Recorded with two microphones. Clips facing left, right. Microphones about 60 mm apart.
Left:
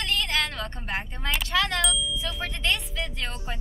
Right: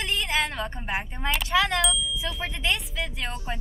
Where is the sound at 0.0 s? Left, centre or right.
Centre.